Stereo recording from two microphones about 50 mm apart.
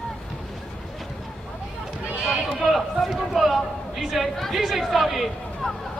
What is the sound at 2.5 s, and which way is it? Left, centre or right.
Speech, centre.